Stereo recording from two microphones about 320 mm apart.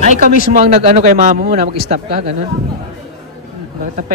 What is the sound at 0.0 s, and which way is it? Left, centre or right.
Speech, right.